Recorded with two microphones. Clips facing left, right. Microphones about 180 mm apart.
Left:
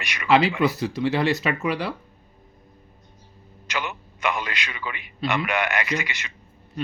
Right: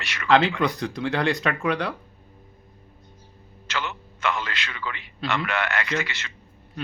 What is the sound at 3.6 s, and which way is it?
A man's voice, 15° left (ahead or behind).